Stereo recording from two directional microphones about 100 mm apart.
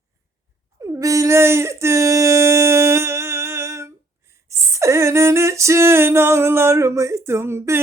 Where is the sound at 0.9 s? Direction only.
35° right (ahead or behind).